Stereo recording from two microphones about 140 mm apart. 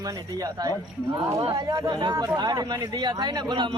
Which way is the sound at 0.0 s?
30° right (ahead or behind).